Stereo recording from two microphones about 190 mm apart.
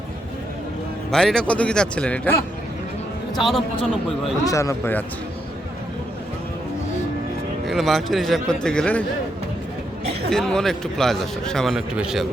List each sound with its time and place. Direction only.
1.1 s a man's voice: 5° left (ahead or behind)
4.4 s speech: 15° left (ahead or behind)
7.7 s a man's voice: centre (ahead or behind)
10.3 s a man's voice: 5° left (ahead or behind)